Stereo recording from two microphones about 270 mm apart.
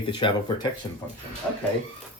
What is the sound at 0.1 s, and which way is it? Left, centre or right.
Speech, centre.